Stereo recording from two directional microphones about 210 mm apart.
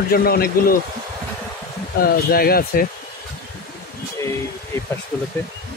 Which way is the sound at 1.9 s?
45° left (ahead or behind).